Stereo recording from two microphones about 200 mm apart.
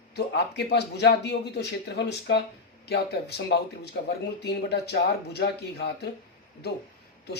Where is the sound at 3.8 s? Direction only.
55° left (ahead or behind).